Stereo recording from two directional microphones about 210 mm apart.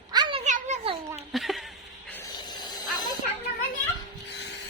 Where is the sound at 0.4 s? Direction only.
35° right (ahead or behind).